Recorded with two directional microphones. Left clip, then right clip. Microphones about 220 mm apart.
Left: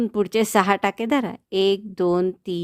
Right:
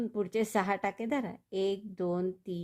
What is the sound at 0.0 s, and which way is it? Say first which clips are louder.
Speech: left 11 dB; 40° left (ahead or behind).